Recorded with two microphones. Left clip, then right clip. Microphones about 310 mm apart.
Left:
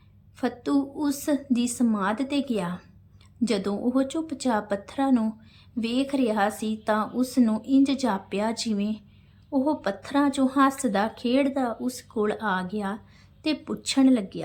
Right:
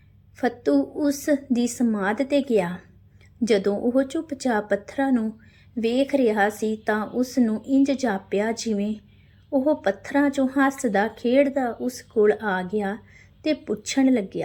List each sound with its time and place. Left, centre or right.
0.3 s a woman's voice: centre